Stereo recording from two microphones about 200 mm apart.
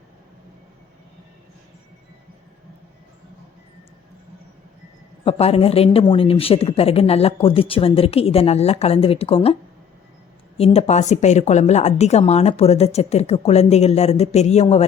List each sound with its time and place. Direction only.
5.2 s speech: 30° left (ahead or behind)
10.6 s a woman's voice: 30° left (ahead or behind)